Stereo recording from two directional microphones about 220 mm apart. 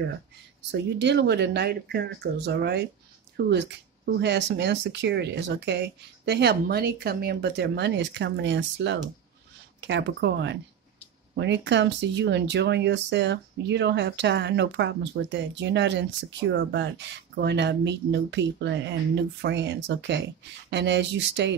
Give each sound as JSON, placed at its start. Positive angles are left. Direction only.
{"t": 0.6, "sound": "speech", "side_deg": -50}